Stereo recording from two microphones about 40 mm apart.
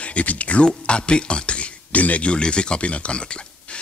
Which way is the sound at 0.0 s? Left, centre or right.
Left.